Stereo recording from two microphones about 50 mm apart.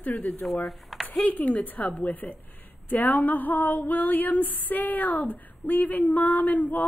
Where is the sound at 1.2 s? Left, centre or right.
Left.